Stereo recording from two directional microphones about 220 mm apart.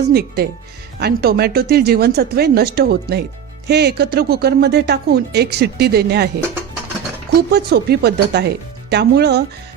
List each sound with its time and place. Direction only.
0.1 s speech: 45° right (ahead or behind)
7.5 s speech: 45° right (ahead or behind)